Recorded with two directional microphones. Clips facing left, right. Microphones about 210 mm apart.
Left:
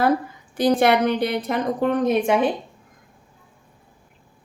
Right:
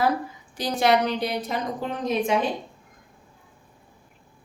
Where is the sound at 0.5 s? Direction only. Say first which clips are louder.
Left 4 dB; 55° left (ahead or behind).